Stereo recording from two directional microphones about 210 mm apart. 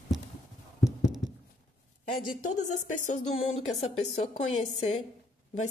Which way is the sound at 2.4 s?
35° left (ahead or behind).